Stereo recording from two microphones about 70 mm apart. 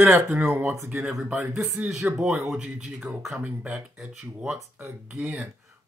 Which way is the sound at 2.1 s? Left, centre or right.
Centre.